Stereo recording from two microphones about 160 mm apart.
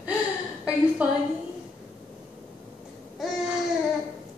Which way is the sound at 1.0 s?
5° right (ahead or behind).